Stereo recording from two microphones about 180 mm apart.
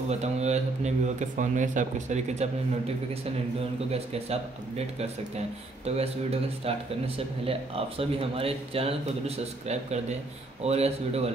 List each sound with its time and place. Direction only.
0.1 s speech: 40° right (ahead or behind)
3.9 s speech: 35° right (ahead or behind)